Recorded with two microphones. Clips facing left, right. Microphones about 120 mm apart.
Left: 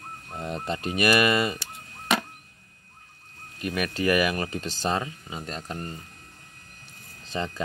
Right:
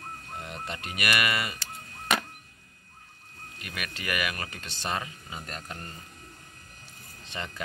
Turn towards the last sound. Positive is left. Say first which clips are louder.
# left 7 dB
turn(degrees=35)  # may be behind; listen again after turning